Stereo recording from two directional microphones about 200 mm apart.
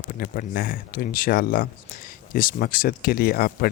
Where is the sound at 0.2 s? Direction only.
45° left (ahead or behind).